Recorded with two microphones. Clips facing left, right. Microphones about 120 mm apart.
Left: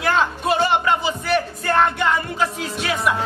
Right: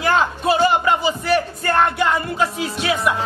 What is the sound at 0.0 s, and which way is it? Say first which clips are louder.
Speech: right 2 dB; centre (ahead or behind).